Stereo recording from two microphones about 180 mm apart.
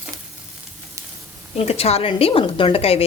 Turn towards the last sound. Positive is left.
turn(degrees=35)  # may be behind; listen again after turning